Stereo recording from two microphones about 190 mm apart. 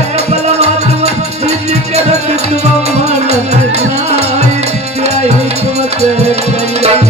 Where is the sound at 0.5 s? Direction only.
35° right (ahead or behind).